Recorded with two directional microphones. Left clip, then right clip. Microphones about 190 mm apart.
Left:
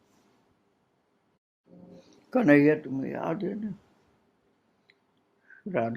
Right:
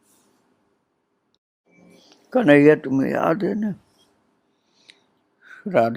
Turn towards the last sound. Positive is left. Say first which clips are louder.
# right 11 dB
turn(degrees=-50)  # may be behind; listen again after turning